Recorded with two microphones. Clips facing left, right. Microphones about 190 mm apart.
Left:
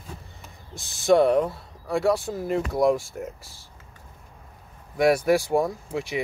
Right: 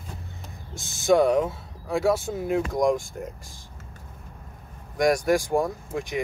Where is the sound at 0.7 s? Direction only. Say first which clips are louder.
Left 1 dB; centre (ahead or behind).